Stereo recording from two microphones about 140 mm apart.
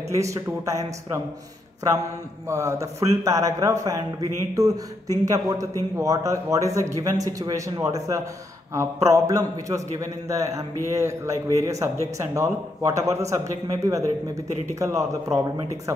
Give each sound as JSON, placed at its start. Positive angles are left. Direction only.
{"t": 0.1, "sound": "speech", "side_deg": -20}
{"t": 2.4, "sound": "speech", "side_deg": -20}